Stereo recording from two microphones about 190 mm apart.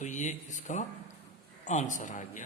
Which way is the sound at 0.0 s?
40° left (ahead or behind).